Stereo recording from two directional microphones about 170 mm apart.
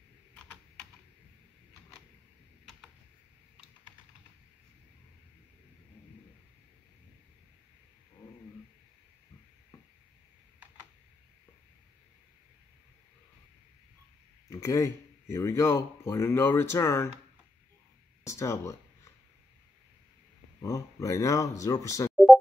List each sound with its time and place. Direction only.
14.5 s speech: 20° left (ahead or behind)
18.2 s speech: 15° left (ahead or behind)
20.6 s speech: 20° left (ahead or behind)
22.1 s busy signal: centre (ahead or behind)